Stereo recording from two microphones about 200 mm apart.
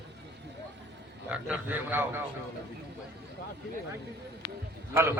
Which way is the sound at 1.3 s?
5° right (ahead or behind).